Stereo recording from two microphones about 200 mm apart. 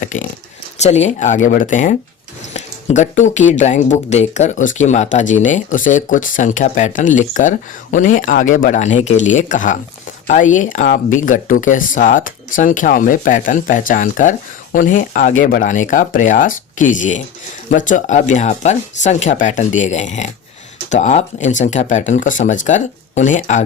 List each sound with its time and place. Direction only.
0.0 s zipper: 40° left (ahead or behind)
0.8 s speech: 35° left (ahead or behind)